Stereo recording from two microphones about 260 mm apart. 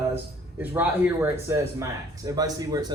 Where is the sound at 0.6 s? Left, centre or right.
Centre.